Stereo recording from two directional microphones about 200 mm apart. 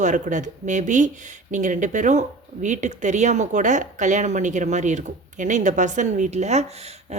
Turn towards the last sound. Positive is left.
turn(degrees=-35)  # may be behind; listen again after turning